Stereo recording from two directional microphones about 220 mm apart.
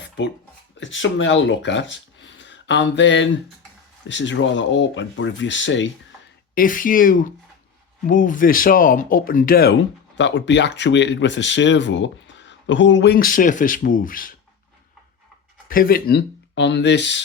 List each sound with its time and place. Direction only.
0.8 s speech: 60° left (ahead or behind)
6.5 s speech: 40° left (ahead or behind)
10.2 s speech: 55° left (ahead or behind); by 14.3 s 40° left (ahead or behind)
15.7 s speech: 40° left (ahead or behind)